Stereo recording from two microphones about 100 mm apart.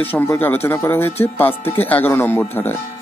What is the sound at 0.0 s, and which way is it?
Speech, 20° left (ahead or behind).